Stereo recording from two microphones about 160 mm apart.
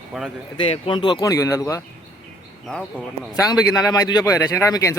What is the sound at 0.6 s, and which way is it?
Speech, 35° left (ahead or behind).